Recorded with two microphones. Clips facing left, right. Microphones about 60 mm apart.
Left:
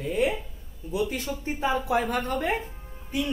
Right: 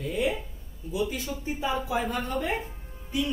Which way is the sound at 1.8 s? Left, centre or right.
Left.